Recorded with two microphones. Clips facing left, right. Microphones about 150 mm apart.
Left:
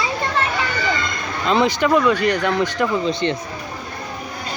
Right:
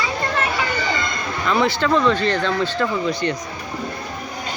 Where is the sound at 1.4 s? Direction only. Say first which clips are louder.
Left 2 dB; 20° left (ahead or behind).